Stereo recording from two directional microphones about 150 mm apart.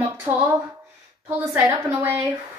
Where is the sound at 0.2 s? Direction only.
15° right (ahead or behind).